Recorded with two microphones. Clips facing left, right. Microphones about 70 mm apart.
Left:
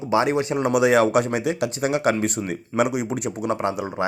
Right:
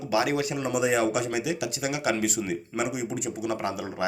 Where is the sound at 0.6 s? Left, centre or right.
Left.